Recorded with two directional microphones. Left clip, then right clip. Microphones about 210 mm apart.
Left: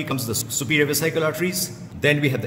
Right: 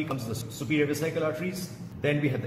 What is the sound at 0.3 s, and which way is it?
A man's voice, 55° left (ahead or behind).